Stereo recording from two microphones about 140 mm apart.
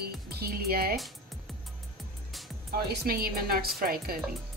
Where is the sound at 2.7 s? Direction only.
90° right.